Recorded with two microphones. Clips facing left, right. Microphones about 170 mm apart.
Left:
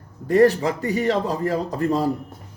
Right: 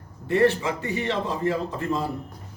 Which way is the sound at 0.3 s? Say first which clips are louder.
Left 5 dB; 40° left (ahead or behind).